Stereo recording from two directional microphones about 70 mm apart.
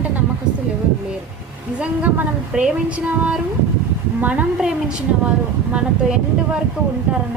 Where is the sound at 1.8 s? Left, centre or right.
Right.